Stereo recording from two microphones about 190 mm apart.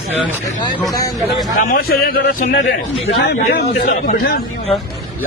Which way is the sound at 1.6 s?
50° left (ahead or behind).